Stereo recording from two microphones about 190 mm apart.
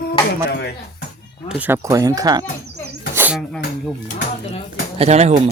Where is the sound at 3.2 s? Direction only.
10° right (ahead or behind).